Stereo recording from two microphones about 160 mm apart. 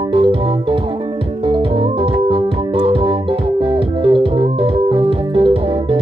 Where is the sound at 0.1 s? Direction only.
35° right (ahead or behind).